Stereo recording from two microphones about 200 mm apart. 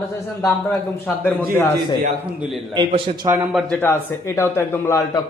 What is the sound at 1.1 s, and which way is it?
Speech, 10° left (ahead or behind).